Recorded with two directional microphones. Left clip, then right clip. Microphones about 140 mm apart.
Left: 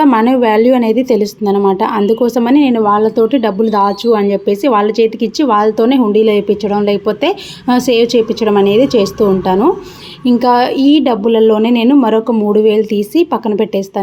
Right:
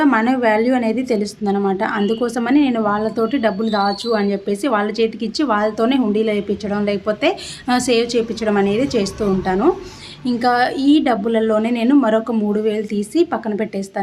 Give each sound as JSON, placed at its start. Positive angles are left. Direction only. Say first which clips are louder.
{"t": 0.0, "sound": "a woman's voice", "louder": "left 6 dB", "side_deg": 20}